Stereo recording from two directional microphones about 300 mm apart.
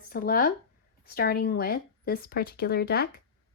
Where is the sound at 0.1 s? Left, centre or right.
Left.